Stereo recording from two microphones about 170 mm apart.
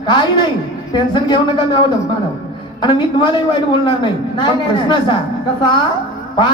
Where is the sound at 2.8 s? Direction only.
25° left (ahead or behind).